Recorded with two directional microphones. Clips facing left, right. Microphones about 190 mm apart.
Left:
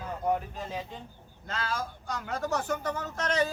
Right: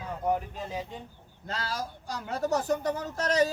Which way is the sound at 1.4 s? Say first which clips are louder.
Even; 35° right (ahead or behind).